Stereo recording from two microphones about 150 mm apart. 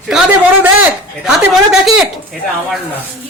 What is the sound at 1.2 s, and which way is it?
Speech, 5° right (ahead or behind).